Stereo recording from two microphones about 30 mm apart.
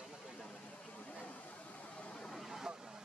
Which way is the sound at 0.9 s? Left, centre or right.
Left.